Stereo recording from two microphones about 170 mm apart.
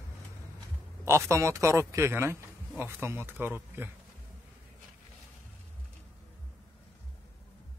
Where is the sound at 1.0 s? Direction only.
15° right (ahead or behind).